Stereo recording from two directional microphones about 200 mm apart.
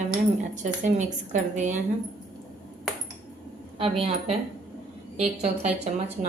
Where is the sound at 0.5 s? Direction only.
35° right (ahead or behind).